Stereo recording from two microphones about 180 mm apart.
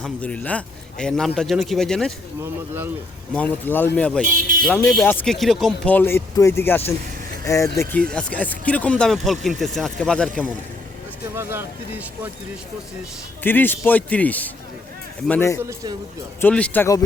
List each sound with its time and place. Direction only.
0.0 s a man's voice: 5° left (ahead or behind)
2.4 s speech: 10° right (ahead or behind)
3.3 s speech: 10° left (ahead or behind)
7.8 s a man's voice: 5° left (ahead or behind)
11.3 s speech: 10° right (ahead or behind)
13.4 s speech: 10° left (ahead or behind)
15.6 s a man's voice: 20° right (ahead or behind)
16.4 s speech: 5° left (ahead or behind)